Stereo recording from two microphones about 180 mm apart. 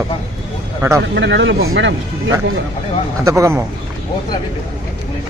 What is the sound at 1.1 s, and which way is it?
Speech, 80° right.